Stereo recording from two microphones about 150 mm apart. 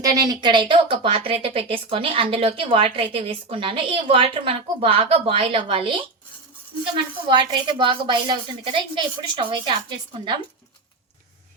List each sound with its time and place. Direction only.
0.0 s a woman's voice: 25° right (ahead or behind)